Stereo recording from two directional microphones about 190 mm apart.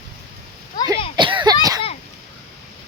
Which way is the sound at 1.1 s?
25° right (ahead or behind).